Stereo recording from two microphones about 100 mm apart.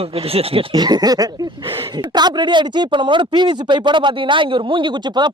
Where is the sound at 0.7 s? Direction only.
45° right (ahead or behind).